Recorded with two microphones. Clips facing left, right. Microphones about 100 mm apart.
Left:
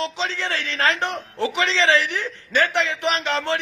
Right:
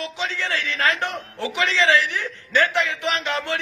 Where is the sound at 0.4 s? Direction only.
30° left (ahead or behind).